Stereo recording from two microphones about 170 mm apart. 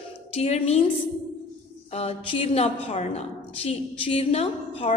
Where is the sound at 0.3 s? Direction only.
40° left (ahead or behind).